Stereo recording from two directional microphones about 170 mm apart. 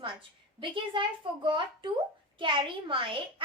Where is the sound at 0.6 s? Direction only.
30° right (ahead or behind).